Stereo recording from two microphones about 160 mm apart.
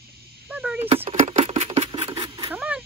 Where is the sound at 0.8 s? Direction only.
35° right (ahead or behind).